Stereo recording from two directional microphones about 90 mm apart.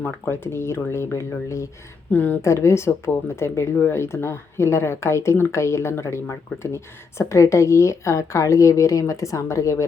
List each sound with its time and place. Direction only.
0.0 s speech: 25° left (ahead or behind)
2.1 s speech: 20° left (ahead or behind)
2.4 s speech: 30° left (ahead or behind)